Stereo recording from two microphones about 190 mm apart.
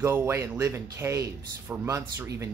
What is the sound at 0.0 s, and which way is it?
Speech, 10° right (ahead or behind).